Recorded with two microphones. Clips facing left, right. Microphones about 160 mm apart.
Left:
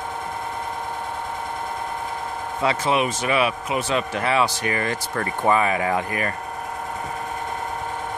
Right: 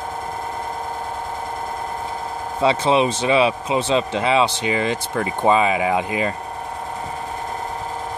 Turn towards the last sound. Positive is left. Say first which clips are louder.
# right 3 dB
turn(degrees=-20)  # may be behind; listen again after turning